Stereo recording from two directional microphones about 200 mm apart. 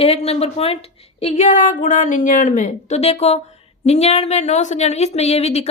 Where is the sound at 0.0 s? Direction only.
30° left (ahead or behind).